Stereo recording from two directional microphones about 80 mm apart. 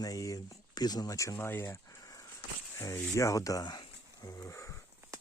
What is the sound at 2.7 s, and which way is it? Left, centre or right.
Speech, left.